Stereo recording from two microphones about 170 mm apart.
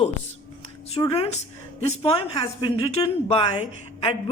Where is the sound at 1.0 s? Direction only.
25° left (ahead or behind).